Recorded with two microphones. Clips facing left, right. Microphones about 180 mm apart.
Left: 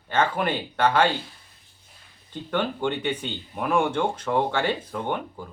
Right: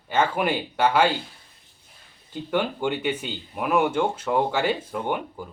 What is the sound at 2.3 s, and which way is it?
Speech, 10° right (ahead or behind).